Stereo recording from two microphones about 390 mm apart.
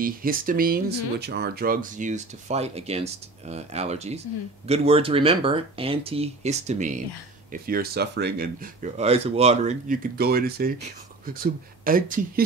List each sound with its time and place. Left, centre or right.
0.0 s speech: right